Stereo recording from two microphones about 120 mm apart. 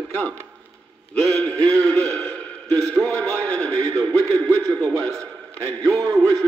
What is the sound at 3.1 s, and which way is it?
Speech, 10° left (ahead or behind).